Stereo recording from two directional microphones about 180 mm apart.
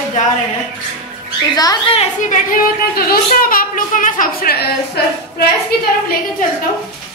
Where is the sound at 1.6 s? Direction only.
20° left (ahead or behind).